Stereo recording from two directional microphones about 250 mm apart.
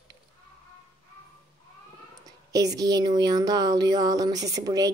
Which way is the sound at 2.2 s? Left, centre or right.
Centre.